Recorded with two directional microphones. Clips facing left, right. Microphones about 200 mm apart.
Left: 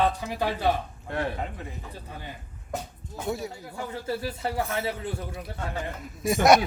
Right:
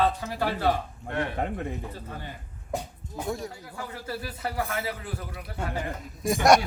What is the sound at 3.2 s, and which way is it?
Speech, 5° left (ahead or behind).